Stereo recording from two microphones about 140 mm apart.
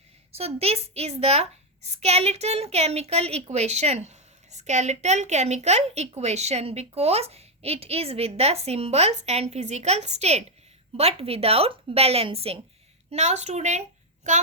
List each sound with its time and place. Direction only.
0.3 s a woman's voice: 45° right (ahead or behind)